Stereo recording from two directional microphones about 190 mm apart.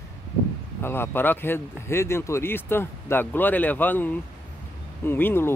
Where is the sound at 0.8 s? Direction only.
10° left (ahead or behind).